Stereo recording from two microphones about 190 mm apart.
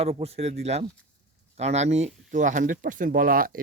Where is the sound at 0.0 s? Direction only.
30° right (ahead or behind).